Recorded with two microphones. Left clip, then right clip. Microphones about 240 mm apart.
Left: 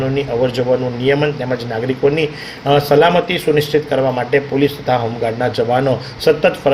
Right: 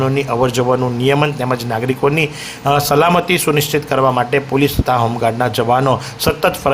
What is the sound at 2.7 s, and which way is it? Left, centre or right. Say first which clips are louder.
Speech: left 1 dB; right.